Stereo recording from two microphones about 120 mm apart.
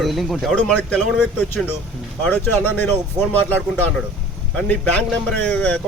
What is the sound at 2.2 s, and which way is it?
A man's voice, 15° left (ahead or behind).